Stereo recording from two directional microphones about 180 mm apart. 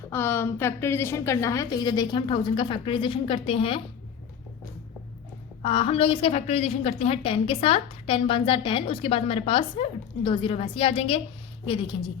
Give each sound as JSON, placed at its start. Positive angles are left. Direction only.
{"t": 0.1, "sound": "a woman's voice", "side_deg": 15}
{"t": 5.6, "sound": "a woman's voice", "side_deg": 30}